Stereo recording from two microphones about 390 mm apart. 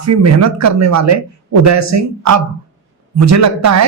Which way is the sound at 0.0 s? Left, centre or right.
Right.